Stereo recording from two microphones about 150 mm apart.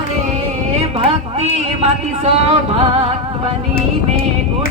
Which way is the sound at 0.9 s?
40° right (ahead or behind).